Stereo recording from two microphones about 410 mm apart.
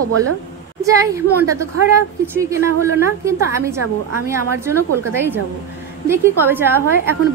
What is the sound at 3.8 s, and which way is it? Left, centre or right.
Speech, right.